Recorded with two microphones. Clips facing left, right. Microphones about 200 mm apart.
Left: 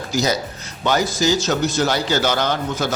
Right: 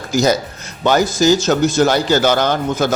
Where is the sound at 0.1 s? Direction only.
50° right (ahead or behind).